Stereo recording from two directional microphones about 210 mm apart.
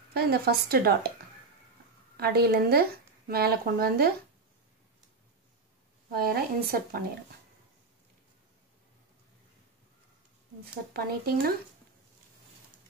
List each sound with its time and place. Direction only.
0.1 s speech: 50° right (ahead or behind)
2.1 s speech: 50° right (ahead or behind)
6.1 s speech: 45° right (ahead or behind)
10.9 s speech: 45° right (ahead or behind)